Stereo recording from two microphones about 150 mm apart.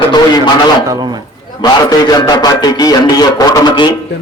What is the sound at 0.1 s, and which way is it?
Speech, 30° left (ahead or behind).